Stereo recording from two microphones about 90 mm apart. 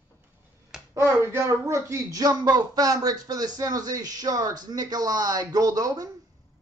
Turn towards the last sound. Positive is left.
turn(degrees=-45)  # may be behind; listen again after turning